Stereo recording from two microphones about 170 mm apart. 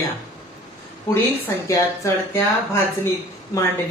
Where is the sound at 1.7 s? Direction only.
15° left (ahead or behind).